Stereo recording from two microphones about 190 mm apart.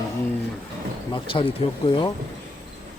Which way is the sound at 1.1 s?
25° left (ahead or behind).